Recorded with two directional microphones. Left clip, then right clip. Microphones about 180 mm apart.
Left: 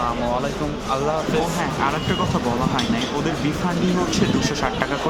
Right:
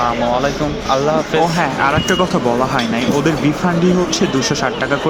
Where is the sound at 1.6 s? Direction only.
25° right (ahead or behind).